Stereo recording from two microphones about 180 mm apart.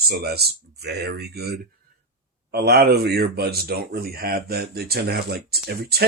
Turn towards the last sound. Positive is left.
turn(degrees=-60)  # may be behind; listen again after turning